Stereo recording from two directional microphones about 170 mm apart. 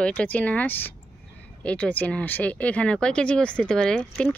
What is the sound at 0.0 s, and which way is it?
Speech, 5° left (ahead or behind).